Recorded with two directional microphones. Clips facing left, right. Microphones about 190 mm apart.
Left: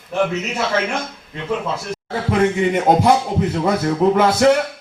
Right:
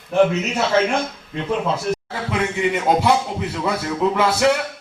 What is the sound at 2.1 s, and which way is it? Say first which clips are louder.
Speech: left 6 dB; 45° left (ahead or behind).